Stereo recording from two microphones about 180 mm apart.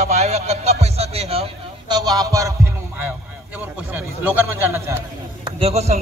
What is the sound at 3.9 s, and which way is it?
A man's voice, 10° right (ahead or behind).